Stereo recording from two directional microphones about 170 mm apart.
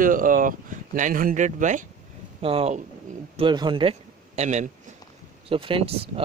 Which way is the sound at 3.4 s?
25° right (ahead or behind).